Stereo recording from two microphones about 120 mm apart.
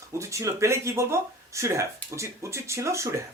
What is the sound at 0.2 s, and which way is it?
Speech, 25° right (ahead or behind).